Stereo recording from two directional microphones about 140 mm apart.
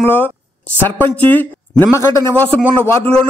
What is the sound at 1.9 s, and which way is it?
Speech, 20° left (ahead or behind).